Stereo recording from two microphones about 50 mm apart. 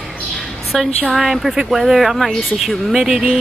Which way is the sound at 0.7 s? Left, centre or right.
Centre.